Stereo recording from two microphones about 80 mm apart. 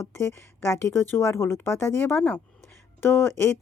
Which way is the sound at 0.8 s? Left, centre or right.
Left.